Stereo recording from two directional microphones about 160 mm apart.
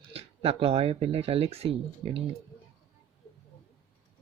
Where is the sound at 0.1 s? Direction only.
35° right (ahead or behind).